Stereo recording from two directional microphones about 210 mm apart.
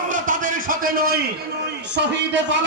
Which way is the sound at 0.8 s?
45° right (ahead or behind).